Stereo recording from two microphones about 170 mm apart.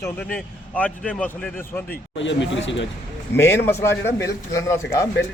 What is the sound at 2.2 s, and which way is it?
Speech, 90° left.